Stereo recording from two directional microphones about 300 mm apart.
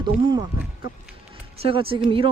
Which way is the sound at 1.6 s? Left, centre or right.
Centre.